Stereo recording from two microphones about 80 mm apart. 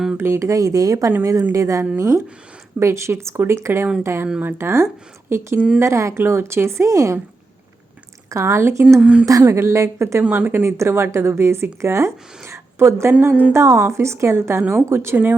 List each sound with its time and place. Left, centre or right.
0.2 s a woman's voice: right
8.3 s a woman's voice: right
9.0 s speech: centre
9.2 s a woman's voice: right
10.2 s a woman's voice: right
12.5 s a sound: right
13.2 s speech: right
13.5 s a woman's voice: right